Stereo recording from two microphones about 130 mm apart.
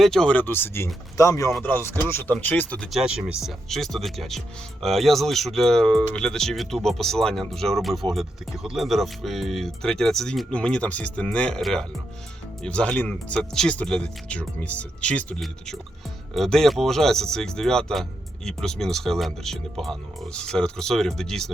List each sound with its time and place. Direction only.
0.0 s speech: 5° left (ahead or behind)
2.9 s speech: 5° right (ahead or behind)